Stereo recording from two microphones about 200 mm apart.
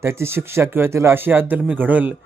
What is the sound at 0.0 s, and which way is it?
Speech, 15° right (ahead or behind).